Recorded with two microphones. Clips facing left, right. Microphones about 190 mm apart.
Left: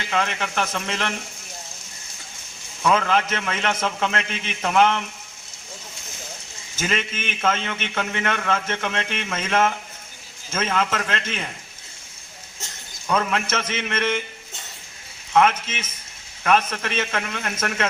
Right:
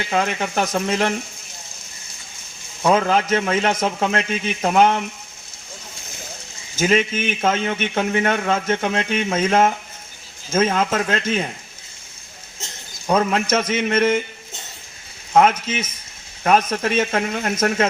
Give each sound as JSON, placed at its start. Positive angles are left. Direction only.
{"t": 0.1, "sound": "a man's voice", "side_deg": -35}
{"t": 2.8, "sound": "a man's voice", "side_deg": -35}
{"t": 6.8, "sound": "a man's voice", "side_deg": -35}
{"t": 13.1, "sound": "a man's voice", "side_deg": -40}
{"t": 15.3, "sound": "a man's voice", "side_deg": -40}